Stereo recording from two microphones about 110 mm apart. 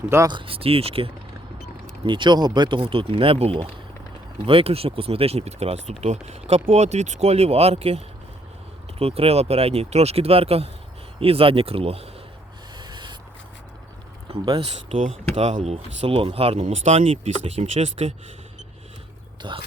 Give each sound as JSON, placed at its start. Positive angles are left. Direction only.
{"t": 0.3, "sound": "speech", "side_deg": -50}
{"t": 2.0, "sound": "speech", "side_deg": -45}
{"t": 6.7, "sound": "speech", "side_deg": -90}
{"t": 12.7, "sound": "a sound", "side_deg": -45}
{"t": 14.3, "sound": "speech", "side_deg": -65}
{"t": 15.4, "sound": "speech", "side_deg": -80}
{"t": 19.4, "sound": "speech", "side_deg": -50}